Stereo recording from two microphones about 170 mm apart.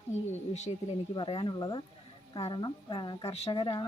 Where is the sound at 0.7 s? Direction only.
30° left (ahead or behind).